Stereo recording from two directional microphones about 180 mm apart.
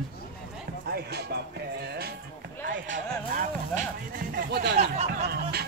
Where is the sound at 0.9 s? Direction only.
65° right (ahead or behind).